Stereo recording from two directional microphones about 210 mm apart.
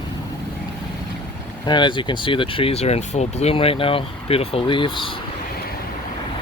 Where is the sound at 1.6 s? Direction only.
20° left (ahead or behind).